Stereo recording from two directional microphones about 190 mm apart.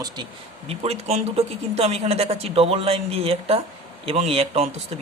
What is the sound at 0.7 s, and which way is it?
Speech, 35° right (ahead or behind).